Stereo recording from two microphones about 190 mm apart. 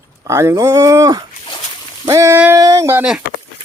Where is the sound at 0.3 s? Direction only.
15° right (ahead or behind).